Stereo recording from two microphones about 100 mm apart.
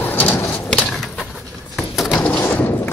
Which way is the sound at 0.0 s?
20° left (ahead or behind).